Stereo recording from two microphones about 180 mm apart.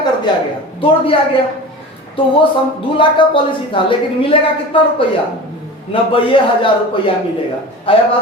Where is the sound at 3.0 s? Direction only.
30° left (ahead or behind).